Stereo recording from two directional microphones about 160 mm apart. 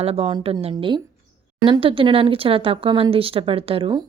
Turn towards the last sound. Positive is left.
turn(degrees=-30)  # may be behind; listen again after turning